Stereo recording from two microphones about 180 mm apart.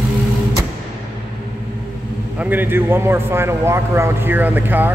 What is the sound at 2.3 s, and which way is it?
A man's voice, 10° right (ahead or behind).